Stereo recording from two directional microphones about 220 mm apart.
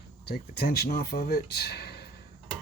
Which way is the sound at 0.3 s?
45° left (ahead or behind).